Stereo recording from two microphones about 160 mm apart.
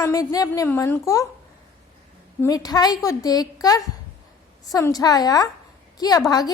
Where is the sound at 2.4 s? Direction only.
25° left (ahead or behind).